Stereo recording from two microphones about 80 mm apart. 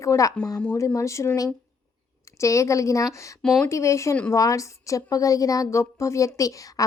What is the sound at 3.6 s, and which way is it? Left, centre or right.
A woman's voice, left.